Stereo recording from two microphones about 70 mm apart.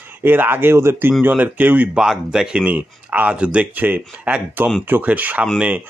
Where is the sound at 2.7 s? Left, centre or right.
Right.